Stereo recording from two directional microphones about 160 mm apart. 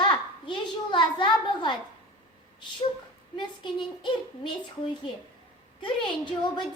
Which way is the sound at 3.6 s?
30° left (ahead or behind).